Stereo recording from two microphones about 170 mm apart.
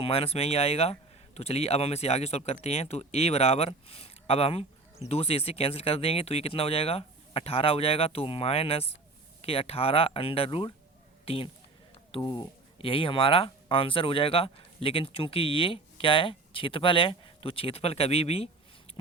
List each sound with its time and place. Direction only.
0.0 s speech: 35° left (ahead or behind)